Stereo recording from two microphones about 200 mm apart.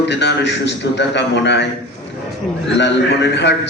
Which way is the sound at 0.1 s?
60° left (ahead or behind).